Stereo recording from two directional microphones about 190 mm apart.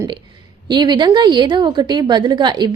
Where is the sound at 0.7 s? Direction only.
25° right (ahead or behind).